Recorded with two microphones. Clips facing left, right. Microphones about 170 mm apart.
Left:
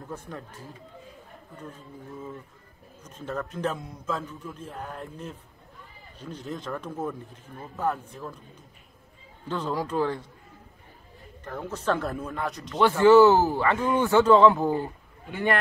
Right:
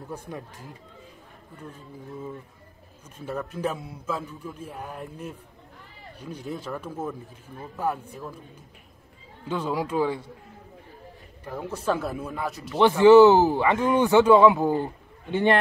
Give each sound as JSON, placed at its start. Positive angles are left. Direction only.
{"t": 0.1, "sound": "speech", "side_deg": -15}
{"t": 3.2, "sound": "speech", "side_deg": -10}
{"t": 9.5, "sound": "speech", "side_deg": -10}
{"t": 11.4, "sound": "speech", "side_deg": -10}
{"t": 12.8, "sound": "speech", "side_deg": -15}